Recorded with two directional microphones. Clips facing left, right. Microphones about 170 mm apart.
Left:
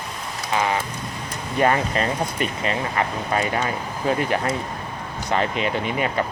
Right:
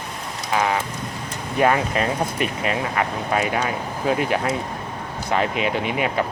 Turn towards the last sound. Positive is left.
turn(degrees=-5)  # may be behind; listen again after turning